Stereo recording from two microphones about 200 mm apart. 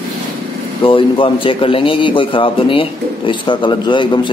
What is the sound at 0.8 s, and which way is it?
A man's voice, 25° left (ahead or behind).